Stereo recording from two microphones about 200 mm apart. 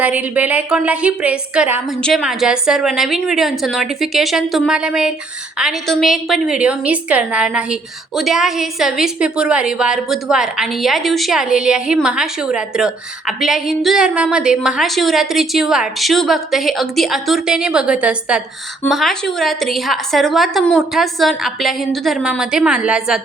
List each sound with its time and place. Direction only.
0.0 s a woman's voice: 10° right (ahead or behind)